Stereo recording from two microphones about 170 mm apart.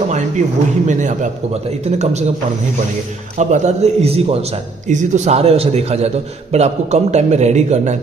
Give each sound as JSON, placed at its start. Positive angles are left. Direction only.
{"t": 0.8, "sound": "a man's voice", "side_deg": -45}
{"t": 3.3, "sound": "a man's voice", "side_deg": -45}